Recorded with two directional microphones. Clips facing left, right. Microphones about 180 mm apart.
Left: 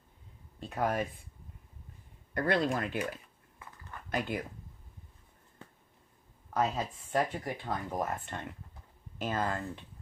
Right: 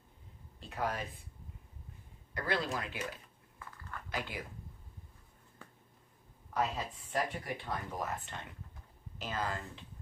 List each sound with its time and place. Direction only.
0.6 s speech: 50° left (ahead or behind)
2.3 s speech: 50° left (ahead or behind)
6.6 s speech: 45° left (ahead or behind)